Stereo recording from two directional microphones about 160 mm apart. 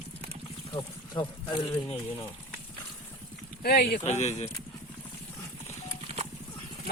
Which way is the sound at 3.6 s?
75° left (ahead or behind).